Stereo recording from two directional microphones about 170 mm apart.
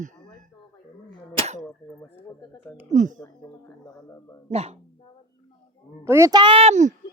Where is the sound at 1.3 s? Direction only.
40° right (ahead or behind).